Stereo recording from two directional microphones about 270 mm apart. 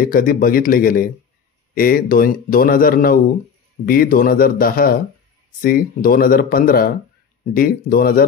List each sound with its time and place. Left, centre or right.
0.0 s a man's voice: left